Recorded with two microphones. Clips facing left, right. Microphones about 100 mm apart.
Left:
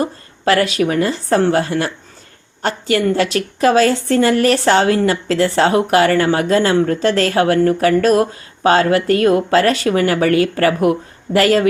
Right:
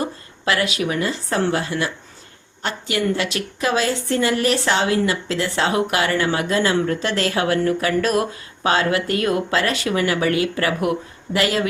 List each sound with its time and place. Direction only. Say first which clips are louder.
0.4 s speech: left 6 dB; 45° left (ahead or behind)